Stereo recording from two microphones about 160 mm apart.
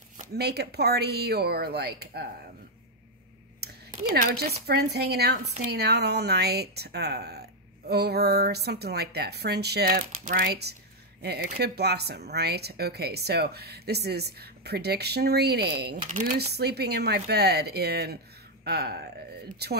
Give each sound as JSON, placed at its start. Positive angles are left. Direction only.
{"t": 0.3, "sound": "speech", "side_deg": -90}
{"t": 3.6, "sound": "a sound", "side_deg": -90}
{"t": 4.1, "sound": "speech", "side_deg": -70}
{"t": 4.6, "sound": "speech", "side_deg": -90}
{"t": 16.1, "sound": "speech", "side_deg": -60}